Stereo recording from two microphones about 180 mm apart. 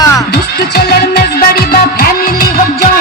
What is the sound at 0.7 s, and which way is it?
Music, 60° left (ahead or behind).